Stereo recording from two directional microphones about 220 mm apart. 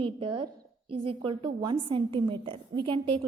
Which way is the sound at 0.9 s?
25° right (ahead or behind).